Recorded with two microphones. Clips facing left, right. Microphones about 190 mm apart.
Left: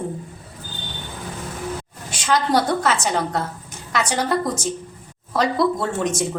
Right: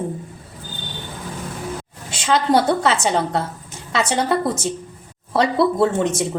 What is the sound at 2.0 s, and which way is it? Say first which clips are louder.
A woman's voice: right 2 dB; 25° right (ahead or behind).